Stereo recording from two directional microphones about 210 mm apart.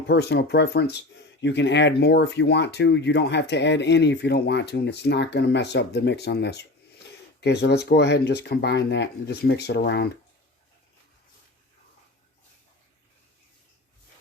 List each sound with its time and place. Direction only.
0.1 s speech: 55° left (ahead or behind)